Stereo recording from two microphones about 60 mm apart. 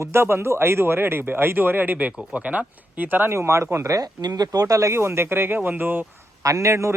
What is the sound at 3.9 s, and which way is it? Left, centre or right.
Speech, right.